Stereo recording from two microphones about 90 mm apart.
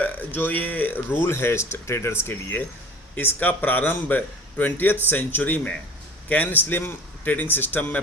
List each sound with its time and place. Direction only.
0.0 s a man's voice: 20° left (ahead or behind)